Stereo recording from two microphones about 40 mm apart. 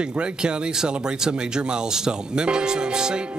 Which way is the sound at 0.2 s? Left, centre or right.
Right.